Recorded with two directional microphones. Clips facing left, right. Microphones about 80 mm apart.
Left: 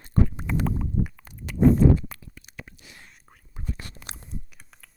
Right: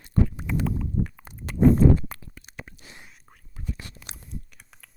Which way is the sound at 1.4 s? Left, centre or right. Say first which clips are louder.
Even; right.